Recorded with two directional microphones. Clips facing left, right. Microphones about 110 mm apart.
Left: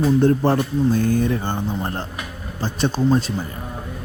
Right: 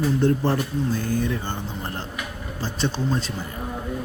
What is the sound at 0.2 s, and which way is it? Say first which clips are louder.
Speech: left 4 dB; 50° left (ahead or behind).